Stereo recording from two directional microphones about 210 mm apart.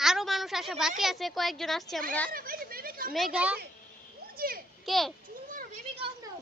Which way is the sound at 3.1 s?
5° right (ahead or behind).